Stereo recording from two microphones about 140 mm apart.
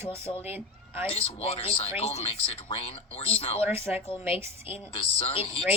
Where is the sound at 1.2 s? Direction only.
45° left (ahead or behind).